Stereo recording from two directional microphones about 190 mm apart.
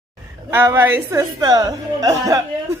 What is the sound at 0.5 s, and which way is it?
A woman's voice, 10° right (ahead or behind).